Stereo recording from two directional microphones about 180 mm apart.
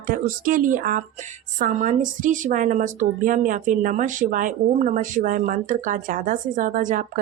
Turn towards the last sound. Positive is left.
turn(degrees=-45)  # may be behind; listen again after turning